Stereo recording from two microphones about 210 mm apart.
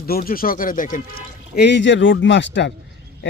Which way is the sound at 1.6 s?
55° left (ahead or behind).